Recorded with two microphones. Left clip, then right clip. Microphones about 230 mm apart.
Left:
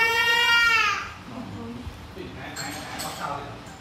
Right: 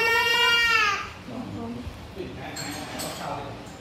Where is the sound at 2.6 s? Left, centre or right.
Centre.